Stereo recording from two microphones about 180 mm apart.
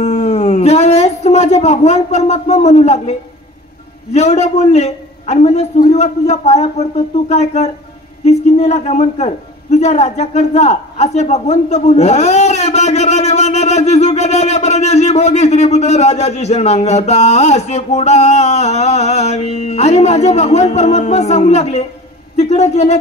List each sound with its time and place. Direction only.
0.0 s howl: 40° left (ahead or behind)
4.1 s a man's voice: 35° left (ahead or behind)